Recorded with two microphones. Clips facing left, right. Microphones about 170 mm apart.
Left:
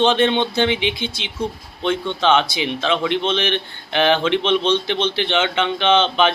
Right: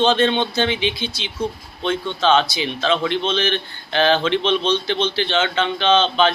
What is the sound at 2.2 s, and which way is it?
Speech, 20° left (ahead or behind).